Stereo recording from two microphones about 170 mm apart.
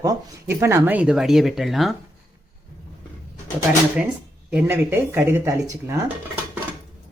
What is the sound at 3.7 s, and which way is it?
Speech, 10° right (ahead or behind).